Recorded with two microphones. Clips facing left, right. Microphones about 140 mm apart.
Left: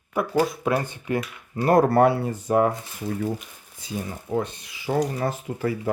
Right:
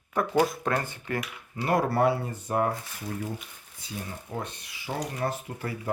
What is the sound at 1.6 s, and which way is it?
Speech, 45° left (ahead or behind).